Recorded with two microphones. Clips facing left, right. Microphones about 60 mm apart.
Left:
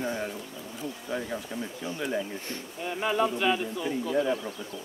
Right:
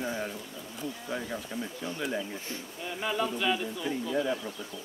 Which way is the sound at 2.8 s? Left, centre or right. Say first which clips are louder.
Left 4 dB; left.